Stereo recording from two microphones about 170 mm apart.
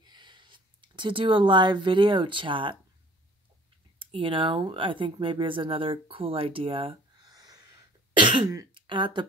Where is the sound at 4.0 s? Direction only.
30° right (ahead or behind).